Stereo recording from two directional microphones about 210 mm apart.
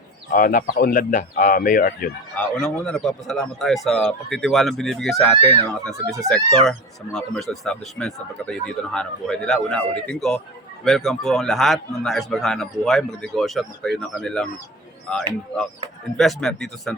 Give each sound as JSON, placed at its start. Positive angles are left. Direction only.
{"t": 0.3, "sound": "speech", "side_deg": 40}
{"t": 2.3, "sound": "speech", "side_deg": 5}